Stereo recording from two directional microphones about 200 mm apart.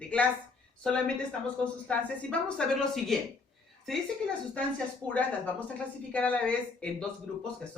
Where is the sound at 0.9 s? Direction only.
5° left (ahead or behind).